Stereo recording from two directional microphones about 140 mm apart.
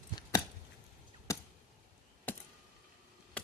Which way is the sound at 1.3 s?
25° left (ahead or behind).